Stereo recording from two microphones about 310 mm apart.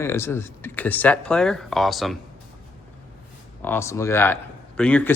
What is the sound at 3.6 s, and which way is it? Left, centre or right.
Speech, centre.